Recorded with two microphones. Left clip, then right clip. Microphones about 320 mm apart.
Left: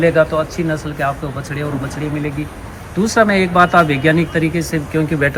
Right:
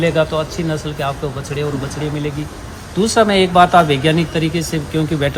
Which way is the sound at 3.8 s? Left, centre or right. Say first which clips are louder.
Even; right.